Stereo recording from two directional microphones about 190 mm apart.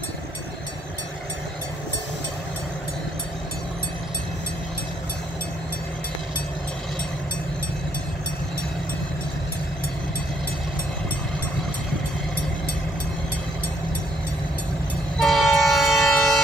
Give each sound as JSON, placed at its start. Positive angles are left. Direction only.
{"t": 15.1, "sound": "train", "side_deg": 0}